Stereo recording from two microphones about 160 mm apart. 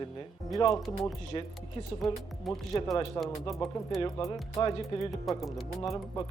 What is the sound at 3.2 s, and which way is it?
Speech, 25° left (ahead or behind).